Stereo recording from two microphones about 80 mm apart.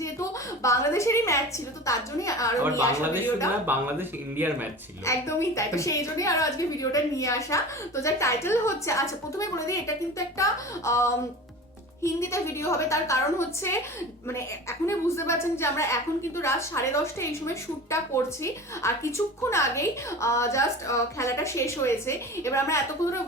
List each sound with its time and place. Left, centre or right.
0.0 s a woman's voice: left
3.0 s speech: right
5.0 s a woman's voice: left